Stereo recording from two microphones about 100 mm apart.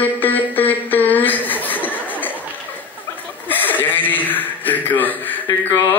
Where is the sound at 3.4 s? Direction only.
20° left (ahead or behind).